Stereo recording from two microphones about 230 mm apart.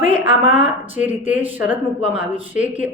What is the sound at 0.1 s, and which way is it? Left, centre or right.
Speech, right.